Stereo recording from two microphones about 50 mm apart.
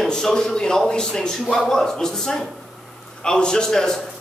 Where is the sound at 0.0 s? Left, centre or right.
Centre.